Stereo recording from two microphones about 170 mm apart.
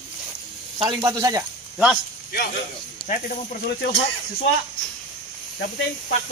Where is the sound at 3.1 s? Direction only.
55° left (ahead or behind).